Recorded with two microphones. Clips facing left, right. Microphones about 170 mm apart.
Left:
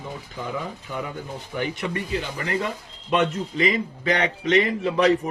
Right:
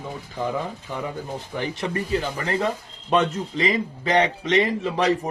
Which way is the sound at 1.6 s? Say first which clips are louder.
Even; 40° right (ahead or behind).